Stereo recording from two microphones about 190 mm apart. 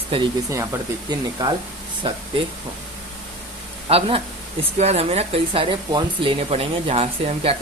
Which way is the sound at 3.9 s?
30° right (ahead or behind).